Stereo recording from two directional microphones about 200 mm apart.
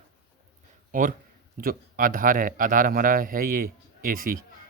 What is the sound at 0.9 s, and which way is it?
A man's voice, 40° right (ahead or behind).